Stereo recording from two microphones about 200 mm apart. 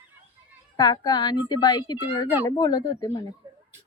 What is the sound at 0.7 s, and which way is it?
A woman's voice, 20° left (ahead or behind).